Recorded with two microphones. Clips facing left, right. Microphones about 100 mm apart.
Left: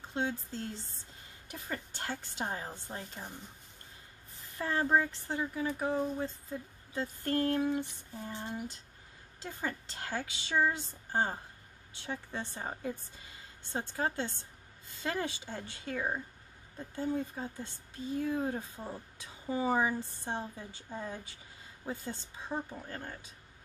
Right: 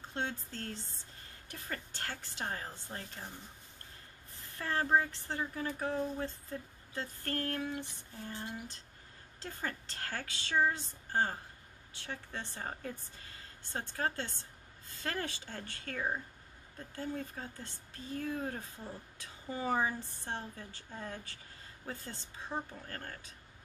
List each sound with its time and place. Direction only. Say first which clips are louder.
0.1 s a woman's voice: left 4 dB; 10° left (ahead or behind)
4.6 s speech: left 2 dB; 15° left (ahead or behind)